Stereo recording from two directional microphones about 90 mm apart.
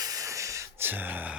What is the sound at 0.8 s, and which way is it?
Speech, 20° right (ahead or behind).